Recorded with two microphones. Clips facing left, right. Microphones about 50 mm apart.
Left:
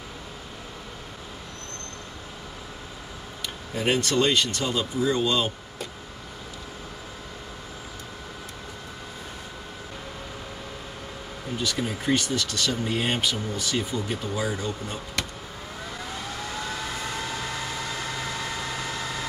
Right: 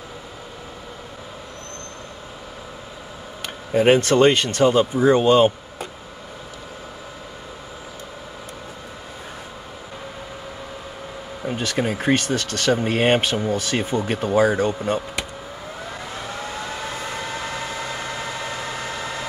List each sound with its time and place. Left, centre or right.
3.4 s speech: right
11.4 s speech: right
14.7 s speech: right
16.2 s vehicle: centre